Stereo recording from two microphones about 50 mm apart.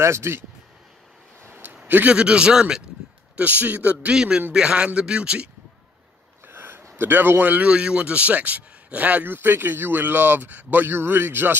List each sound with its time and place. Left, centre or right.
0.0 s speech: right
1.4 s a sound: right
1.9 s a man's voice: right
2.1 s speech: right
3.3 s speech: right
4.1 s a man's voice: centre
6.4 s a sound: right
7.0 s speech: right
7.6 s speech: right
9.3 s speech: right